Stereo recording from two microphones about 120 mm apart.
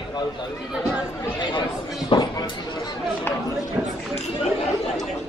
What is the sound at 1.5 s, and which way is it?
Speech, 40° left (ahead or behind).